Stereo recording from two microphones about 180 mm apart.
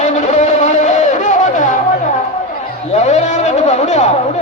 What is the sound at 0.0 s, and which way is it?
Music, 40° left (ahead or behind).